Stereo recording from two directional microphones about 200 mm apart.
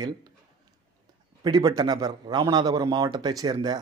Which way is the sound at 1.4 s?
20° right (ahead or behind).